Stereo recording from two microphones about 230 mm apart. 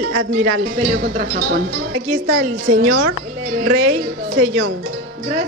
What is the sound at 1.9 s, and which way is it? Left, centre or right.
Speech, right.